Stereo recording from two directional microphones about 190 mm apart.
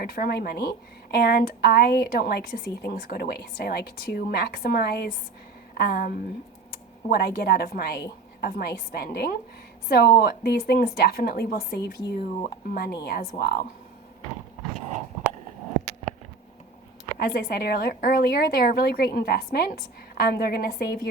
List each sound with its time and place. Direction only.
0.0 s a woman's voice: 55° left (ahead or behind)
17.2 s a woman's voice: 55° left (ahead or behind)